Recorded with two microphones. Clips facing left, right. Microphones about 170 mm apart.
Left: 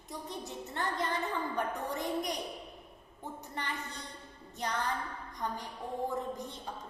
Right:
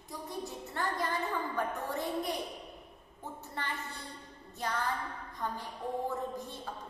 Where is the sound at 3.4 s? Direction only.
15° left (ahead or behind).